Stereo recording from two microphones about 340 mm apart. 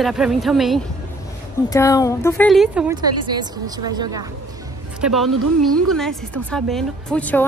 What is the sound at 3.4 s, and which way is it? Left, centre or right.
Speech, centre.